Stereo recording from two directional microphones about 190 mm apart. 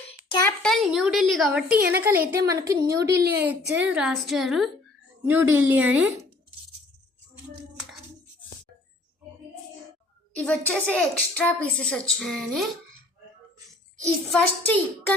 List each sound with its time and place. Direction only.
0.1 s a sound: 25° left (ahead or behind)
0.4 s a woman's voice: 5° left (ahead or behind); by 3.2 s 15° right (ahead or behind)
3.8 s a woman's voice: 5° right (ahead or behind)
10.3 s a woman's voice: 5° left (ahead or behind)
14.3 s a woman's voice: 5° left (ahead or behind)